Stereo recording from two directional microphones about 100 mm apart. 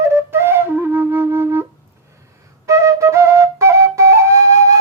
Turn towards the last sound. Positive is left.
turn(degrees=-30)  # may be behind; listen again after turning